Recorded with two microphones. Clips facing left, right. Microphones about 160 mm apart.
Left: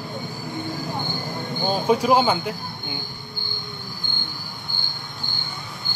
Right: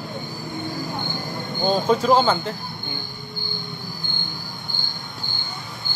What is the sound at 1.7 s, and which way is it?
Speech, 10° left (ahead or behind).